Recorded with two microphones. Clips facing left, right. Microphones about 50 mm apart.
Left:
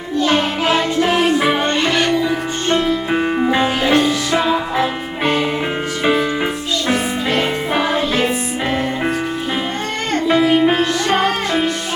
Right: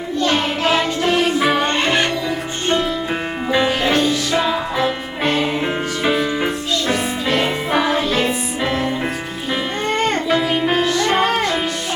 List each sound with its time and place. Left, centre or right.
0.2 s music: centre
1.6 s music: right
2.7 s music: centre
10.2 s music: centre